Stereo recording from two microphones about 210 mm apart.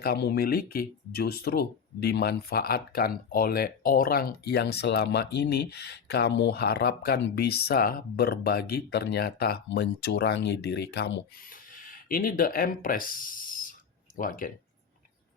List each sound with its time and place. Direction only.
0.0 s speech: 50° left (ahead or behind)